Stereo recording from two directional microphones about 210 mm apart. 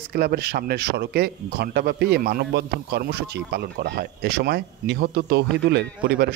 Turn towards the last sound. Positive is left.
turn(degrees=-50)  # may be behind; listen again after turning